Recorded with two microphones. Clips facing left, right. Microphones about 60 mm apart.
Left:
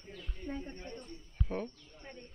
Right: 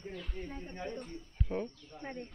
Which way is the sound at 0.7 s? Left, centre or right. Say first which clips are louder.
Right 5 dB; right.